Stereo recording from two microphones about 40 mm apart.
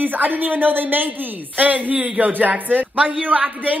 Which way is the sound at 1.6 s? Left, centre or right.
Right.